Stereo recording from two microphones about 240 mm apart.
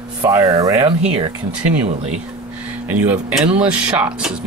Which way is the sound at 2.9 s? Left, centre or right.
Centre.